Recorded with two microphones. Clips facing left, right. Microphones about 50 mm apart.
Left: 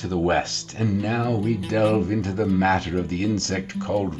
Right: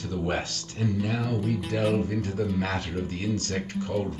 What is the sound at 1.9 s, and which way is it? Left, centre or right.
Speech, left.